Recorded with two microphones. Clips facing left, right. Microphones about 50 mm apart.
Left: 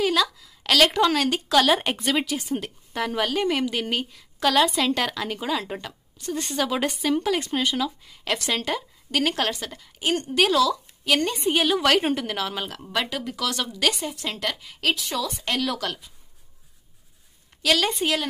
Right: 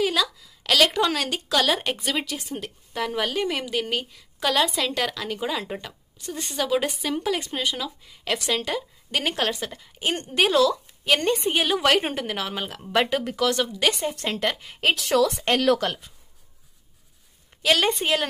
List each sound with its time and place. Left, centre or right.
0.0 s a woman's voice: centre
5.4 s a woman's voice: centre
9.1 s a woman's voice: centre
12.9 s a woman's voice: right
14.1 s a woman's voice: right
14.4 s a woman's voice: right
15.0 s speech: right
15.8 s a woman's voice: right
17.5 s a sound: right
18.0 s a woman's voice: right